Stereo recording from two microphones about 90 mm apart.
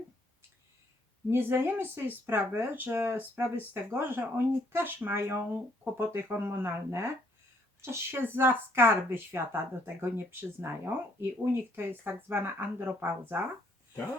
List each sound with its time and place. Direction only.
1.3 s a woman's voice: 25° right (ahead or behind)